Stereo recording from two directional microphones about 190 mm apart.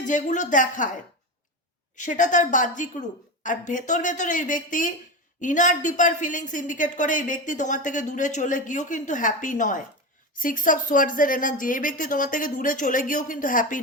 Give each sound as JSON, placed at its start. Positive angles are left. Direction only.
{"t": 0.0, "sound": "a woman's voice", "side_deg": 40}
{"t": 2.0, "sound": "a woman's voice", "side_deg": 40}